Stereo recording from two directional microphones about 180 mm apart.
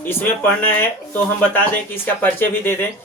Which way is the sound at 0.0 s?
10° left (ahead or behind).